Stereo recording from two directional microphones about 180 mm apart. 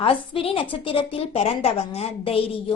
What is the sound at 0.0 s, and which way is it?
A woman's voice, 30° left (ahead or behind).